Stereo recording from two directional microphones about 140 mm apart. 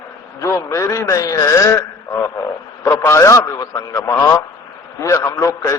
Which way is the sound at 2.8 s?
20° left (ahead or behind).